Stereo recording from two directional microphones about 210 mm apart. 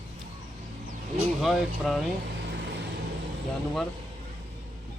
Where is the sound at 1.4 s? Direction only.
Centre (ahead or behind).